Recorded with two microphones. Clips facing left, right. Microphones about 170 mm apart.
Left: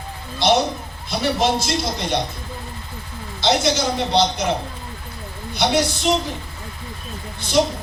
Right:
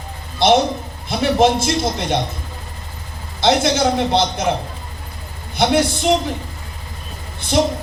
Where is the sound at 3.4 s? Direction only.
55° right (ahead or behind).